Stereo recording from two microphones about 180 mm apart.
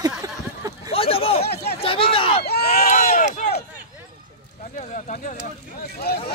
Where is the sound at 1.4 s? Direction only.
65° left (ahead or behind).